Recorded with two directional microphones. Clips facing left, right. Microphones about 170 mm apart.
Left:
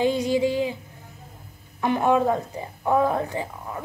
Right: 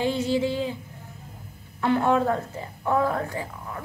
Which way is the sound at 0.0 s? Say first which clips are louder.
Left 3 dB; 15° left (ahead or behind).